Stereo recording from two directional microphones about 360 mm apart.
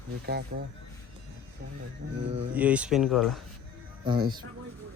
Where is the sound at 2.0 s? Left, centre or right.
Right.